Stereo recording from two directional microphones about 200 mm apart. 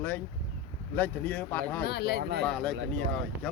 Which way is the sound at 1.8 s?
55° left (ahead or behind).